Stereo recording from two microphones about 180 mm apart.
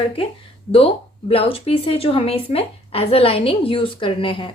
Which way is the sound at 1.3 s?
30° left (ahead or behind).